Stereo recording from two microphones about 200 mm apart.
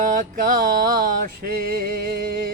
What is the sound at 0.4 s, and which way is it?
Music, 45° right (ahead or behind).